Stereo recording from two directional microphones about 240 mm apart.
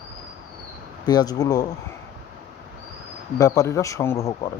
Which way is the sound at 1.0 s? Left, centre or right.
Centre.